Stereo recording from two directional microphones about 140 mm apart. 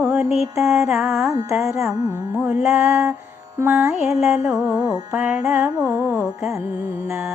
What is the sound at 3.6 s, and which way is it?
Music, 10° right (ahead or behind).